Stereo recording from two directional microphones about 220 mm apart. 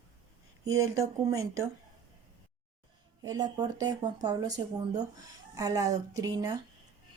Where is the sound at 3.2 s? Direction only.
15° right (ahead or behind).